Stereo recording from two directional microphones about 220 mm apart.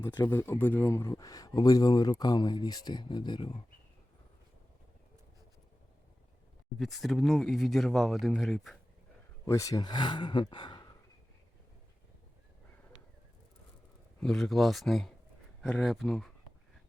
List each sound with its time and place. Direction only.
0.0 s a man's voice: 10° left (ahead or behind)
6.7 s speech: centre (ahead or behind)
9.5 s speech: 15° left (ahead or behind)
14.2 s speech: 5° left (ahead or behind)